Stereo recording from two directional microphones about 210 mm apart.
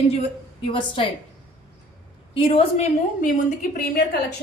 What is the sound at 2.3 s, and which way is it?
A woman's voice, 25° left (ahead or behind).